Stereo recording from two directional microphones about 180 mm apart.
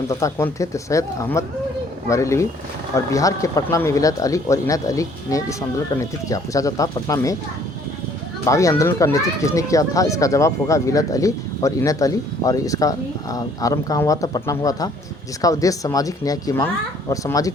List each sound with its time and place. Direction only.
0.1 s speech: 15° left (ahead or behind)
8.4 s speech: 15° left (ahead or behind)